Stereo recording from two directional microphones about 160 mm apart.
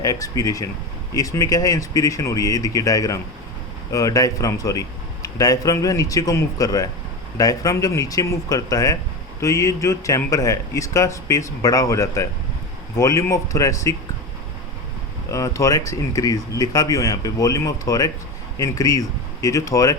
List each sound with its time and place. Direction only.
0.0 s a man's voice: 20° left (ahead or behind)
15.3 s a man's voice: 20° left (ahead or behind)